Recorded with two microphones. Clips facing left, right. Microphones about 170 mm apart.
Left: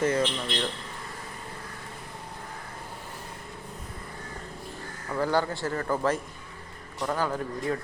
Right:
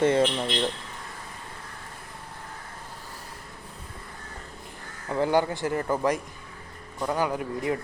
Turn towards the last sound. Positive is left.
turn(degrees=-15)  # may be behind; listen again after turning